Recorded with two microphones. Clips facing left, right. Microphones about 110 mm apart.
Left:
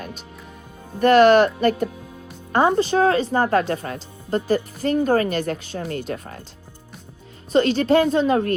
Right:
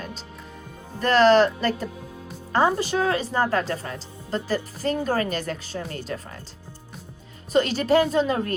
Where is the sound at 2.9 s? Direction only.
45° left (ahead or behind).